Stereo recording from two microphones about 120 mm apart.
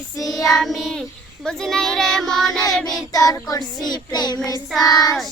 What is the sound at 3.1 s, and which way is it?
Child singing, 30° left (ahead or behind).